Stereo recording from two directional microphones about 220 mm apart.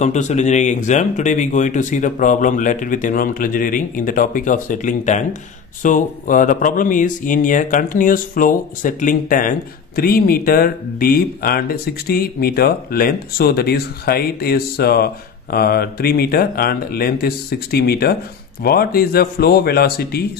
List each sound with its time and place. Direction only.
0.0 s speech: 30° left (ahead or behind)